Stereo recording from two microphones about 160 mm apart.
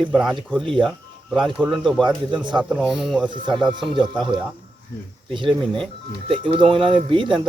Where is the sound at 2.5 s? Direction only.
5° right (ahead or behind).